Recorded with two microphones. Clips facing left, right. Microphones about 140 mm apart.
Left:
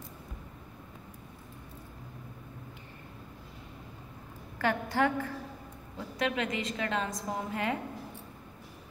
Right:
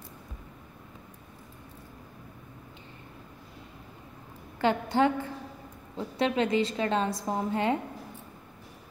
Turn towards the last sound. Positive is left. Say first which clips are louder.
# right 5 dB
turn(degrees=-25)  # may be behind; listen again after turning